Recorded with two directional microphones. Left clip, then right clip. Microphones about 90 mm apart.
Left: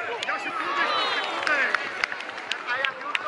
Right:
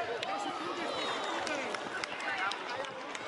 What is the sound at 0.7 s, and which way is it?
Run, 25° left (ahead or behind).